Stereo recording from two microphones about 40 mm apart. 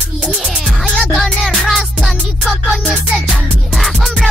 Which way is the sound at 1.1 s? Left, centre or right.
Centre.